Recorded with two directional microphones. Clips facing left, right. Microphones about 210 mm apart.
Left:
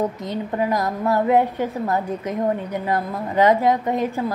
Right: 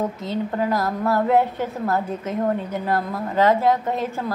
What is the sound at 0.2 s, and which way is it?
A woman's voice, 15° left (ahead or behind).